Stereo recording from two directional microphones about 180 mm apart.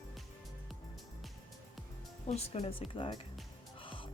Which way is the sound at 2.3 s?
35° left (ahead or behind).